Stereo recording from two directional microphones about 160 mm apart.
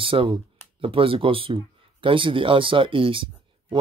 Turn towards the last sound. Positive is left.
turn(degrees=-35)  # may be behind; listen again after turning